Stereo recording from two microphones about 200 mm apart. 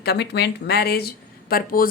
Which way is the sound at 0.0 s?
55° left (ahead or behind).